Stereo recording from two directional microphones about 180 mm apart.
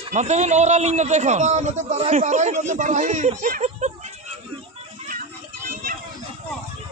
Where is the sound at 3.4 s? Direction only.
45° right (ahead or behind).